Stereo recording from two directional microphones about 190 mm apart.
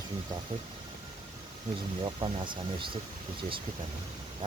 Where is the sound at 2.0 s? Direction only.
25° right (ahead or behind).